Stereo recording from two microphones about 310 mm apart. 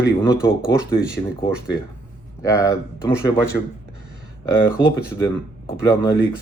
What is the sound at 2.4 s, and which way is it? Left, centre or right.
Speech, centre.